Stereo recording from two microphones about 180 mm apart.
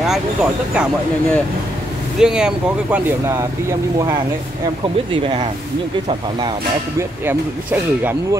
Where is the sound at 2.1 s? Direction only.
5° right (ahead or behind).